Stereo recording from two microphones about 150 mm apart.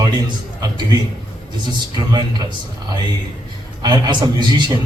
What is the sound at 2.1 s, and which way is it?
A man's voice, 30° right (ahead or behind).